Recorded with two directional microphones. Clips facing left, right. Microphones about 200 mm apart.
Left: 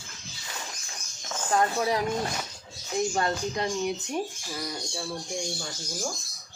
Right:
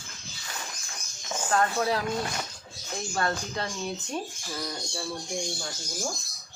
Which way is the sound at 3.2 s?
15° left (ahead or behind).